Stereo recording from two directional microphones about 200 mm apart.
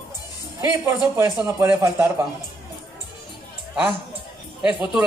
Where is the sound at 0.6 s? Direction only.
10° right (ahead or behind).